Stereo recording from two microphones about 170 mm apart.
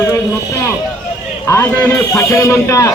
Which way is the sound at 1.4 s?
15° left (ahead or behind).